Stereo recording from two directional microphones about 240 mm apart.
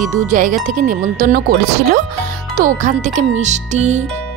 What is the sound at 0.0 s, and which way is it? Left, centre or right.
Speech, right.